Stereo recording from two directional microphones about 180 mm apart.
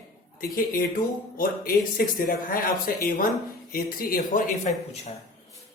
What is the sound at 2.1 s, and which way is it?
Speech, 50° left (ahead or behind).